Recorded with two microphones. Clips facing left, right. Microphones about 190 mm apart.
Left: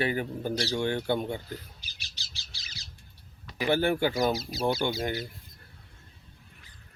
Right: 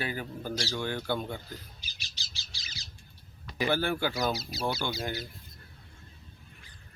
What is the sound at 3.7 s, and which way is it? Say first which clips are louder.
Speech: left 5 dB; 20° left (ahead or behind).